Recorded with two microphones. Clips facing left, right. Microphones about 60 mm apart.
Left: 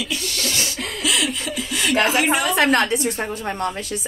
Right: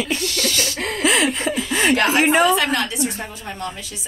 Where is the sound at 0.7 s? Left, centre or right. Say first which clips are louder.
Right 6 dB; right.